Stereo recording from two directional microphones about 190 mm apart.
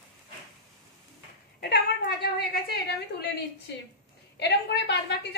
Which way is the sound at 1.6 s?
60° left (ahead or behind).